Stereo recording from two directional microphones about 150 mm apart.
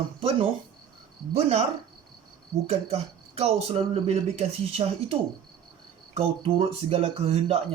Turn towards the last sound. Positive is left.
turn(degrees=-40)  # may be behind; listen again after turning